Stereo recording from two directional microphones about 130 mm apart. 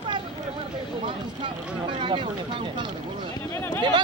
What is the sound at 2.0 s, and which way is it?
Speech, 40° right (ahead or behind).